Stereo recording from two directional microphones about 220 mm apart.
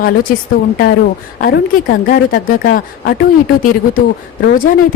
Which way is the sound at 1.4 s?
45° left (ahead or behind).